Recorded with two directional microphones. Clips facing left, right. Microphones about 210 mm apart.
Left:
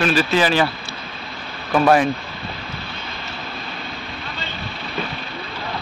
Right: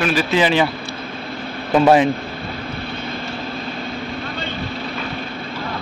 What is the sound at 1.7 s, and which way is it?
Speech, 20° right (ahead or behind).